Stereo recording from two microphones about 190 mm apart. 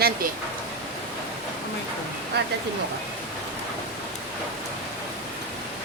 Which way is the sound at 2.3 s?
60° right (ahead or behind).